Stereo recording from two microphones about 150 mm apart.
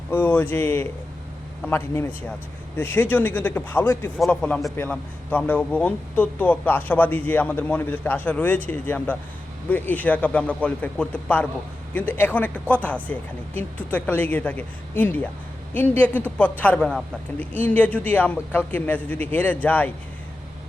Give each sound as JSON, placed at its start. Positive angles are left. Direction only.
{"t": 0.1, "sound": "speech", "side_deg": 10}